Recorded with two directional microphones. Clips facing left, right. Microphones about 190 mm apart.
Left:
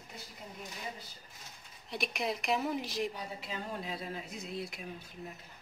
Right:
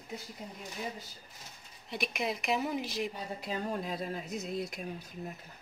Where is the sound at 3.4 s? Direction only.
45° right (ahead or behind).